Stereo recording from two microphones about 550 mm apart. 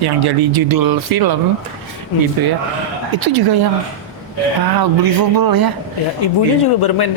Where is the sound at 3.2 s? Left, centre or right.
Right.